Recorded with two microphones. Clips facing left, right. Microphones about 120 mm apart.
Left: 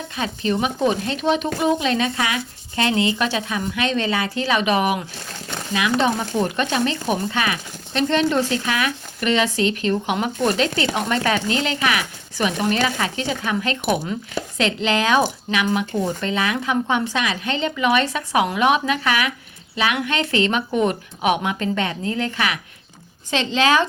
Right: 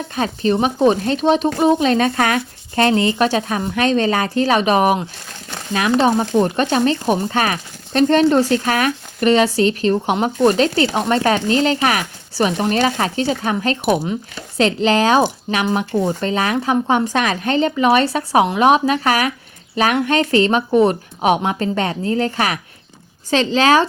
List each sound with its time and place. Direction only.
0.2 s speech: 40° right (ahead or behind)